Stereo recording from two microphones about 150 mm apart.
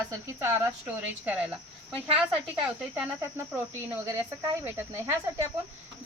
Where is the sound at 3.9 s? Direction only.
15° right (ahead or behind).